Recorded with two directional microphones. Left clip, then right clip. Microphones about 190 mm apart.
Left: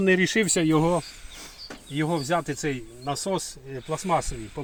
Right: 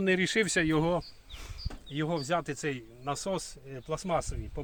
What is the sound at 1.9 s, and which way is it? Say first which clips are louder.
Speech: left 5 dB; 15° right (ahead or behind).